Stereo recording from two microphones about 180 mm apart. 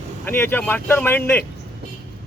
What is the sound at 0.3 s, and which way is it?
Speech, 10° left (ahead or behind).